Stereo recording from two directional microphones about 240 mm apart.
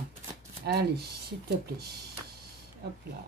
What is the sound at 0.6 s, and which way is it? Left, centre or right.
Speech, right.